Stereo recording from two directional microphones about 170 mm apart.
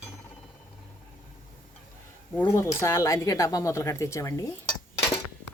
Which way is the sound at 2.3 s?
15° left (ahead or behind).